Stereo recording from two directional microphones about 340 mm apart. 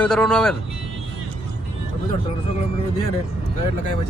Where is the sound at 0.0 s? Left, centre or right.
Centre.